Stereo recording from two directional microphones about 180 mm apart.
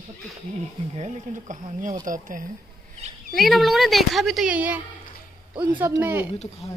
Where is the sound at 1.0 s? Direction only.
45° right (ahead or behind).